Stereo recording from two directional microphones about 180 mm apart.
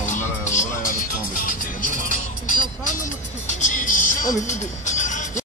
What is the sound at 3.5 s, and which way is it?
Speech, 45° left (ahead or behind).